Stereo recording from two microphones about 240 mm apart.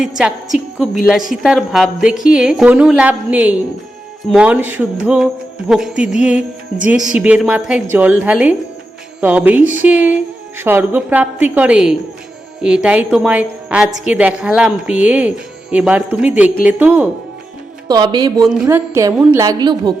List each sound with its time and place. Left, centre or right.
0.2 s a woman's voice: centre
17.8 s a woman's voice: centre